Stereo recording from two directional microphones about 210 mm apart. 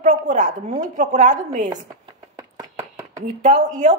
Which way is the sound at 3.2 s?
35° right (ahead or behind).